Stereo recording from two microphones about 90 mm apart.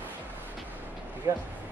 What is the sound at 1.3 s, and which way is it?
Speech, 35° right (ahead or behind).